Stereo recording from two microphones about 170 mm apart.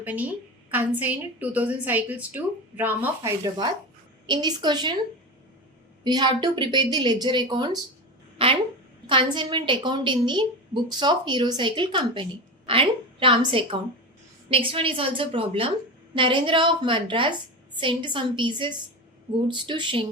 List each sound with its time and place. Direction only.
0.0 s a woman's voice: 10° right (ahead or behind)
4.3 s speech: 25° right (ahead or behind)
6.1 s a woman's voice: 25° right (ahead or behind)